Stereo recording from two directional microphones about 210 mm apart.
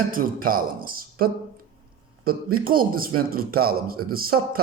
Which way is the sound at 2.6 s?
45° right (ahead or behind).